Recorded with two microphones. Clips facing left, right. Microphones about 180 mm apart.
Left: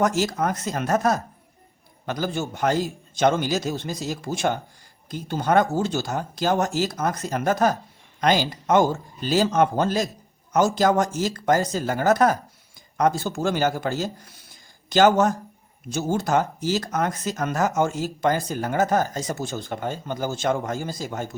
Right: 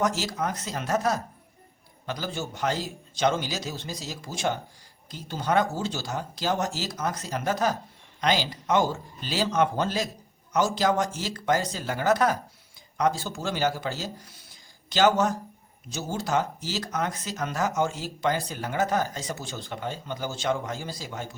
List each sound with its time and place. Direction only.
0.0 s speech: 50° left (ahead or behind)